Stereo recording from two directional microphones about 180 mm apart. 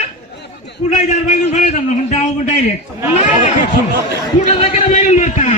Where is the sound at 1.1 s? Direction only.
40° left (ahead or behind).